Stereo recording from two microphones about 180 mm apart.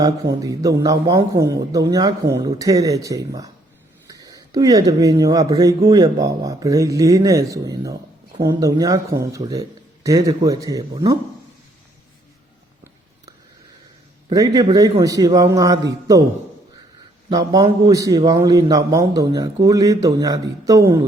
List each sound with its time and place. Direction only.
0.0 s speech: 20° right (ahead or behind)
14.3 s speech: 20° right (ahead or behind)
17.2 s speech: 20° right (ahead or behind)